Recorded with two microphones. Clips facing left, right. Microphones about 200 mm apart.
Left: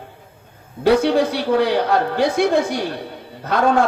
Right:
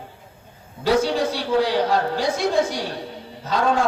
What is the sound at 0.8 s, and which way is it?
A man's voice, 60° left (ahead or behind).